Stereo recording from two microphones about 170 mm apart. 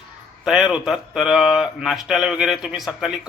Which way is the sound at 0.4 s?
5° right (ahead or behind).